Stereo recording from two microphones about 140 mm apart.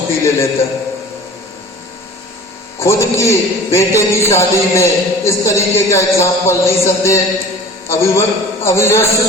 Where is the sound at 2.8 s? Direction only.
20° left (ahead or behind).